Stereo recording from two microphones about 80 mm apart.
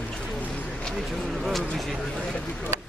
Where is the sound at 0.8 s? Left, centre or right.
Centre.